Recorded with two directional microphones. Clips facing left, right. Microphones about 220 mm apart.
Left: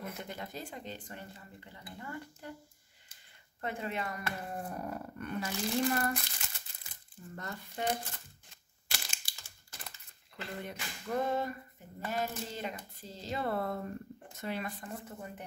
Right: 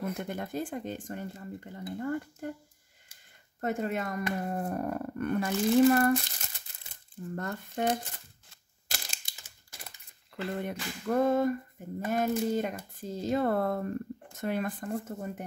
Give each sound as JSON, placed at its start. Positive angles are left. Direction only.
{"t": 0.0, "sound": "speech", "side_deg": -50}
{"t": 3.6, "sound": "speech", "side_deg": -45}
{"t": 7.2, "sound": "speech", "side_deg": -55}
{"t": 8.8, "sound": "crushing", "side_deg": -40}
{"t": 9.2, "sound": "typing", "side_deg": -15}
{"t": 10.3, "sound": "speech", "side_deg": -55}